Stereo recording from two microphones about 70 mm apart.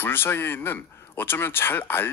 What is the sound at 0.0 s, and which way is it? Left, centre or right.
Speech, left.